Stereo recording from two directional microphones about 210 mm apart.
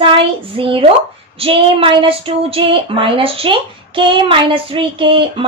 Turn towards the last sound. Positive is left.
turn(degrees=-25)  # may be behind; listen again after turning